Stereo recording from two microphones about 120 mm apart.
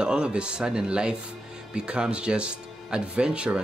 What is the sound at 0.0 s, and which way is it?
Speech, 5° right (ahead or behind).